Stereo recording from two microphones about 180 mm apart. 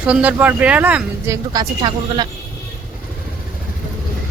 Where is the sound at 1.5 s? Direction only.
25° right (ahead or behind).